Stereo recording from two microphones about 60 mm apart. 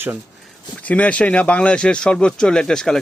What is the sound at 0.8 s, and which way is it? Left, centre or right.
Speech, left.